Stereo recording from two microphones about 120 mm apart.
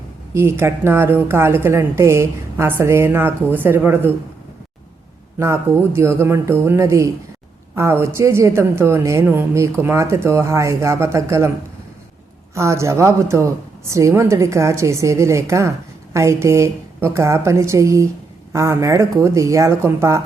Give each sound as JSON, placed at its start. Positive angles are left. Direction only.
{"t": 0.3, "sound": "a woman's voice", "side_deg": -20}
{"t": 5.4, "sound": "a woman's voice", "side_deg": -20}
{"t": 12.5, "sound": "a woman's voice", "side_deg": -25}